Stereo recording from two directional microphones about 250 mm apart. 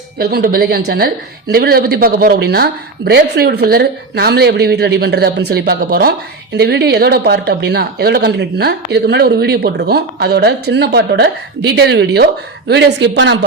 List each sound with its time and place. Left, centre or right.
0.2 s speech: right